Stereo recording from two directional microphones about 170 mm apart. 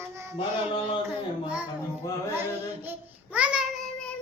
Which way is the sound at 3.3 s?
5° right (ahead or behind).